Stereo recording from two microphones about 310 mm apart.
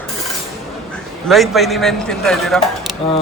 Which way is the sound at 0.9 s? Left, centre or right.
Centre.